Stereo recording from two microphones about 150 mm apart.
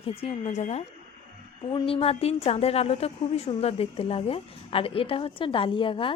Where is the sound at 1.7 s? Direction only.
35° left (ahead or behind).